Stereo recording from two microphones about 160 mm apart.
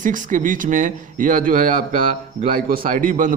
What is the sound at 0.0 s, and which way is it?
A man's voice, 55° right (ahead or behind).